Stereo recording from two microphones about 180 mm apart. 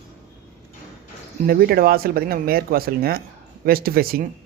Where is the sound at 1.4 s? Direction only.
55° right (ahead or behind).